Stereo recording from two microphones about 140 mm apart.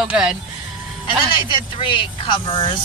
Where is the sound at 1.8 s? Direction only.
35° left (ahead or behind).